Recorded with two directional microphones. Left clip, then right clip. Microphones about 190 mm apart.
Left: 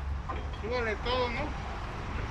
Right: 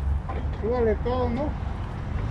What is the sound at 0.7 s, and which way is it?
Speech, 35° right (ahead or behind).